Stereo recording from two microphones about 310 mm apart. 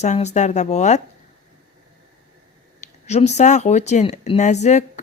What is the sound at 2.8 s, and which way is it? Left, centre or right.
Speech, left.